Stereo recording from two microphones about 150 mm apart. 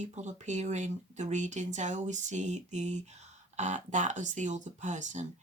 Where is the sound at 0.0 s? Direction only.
50° right (ahead or behind).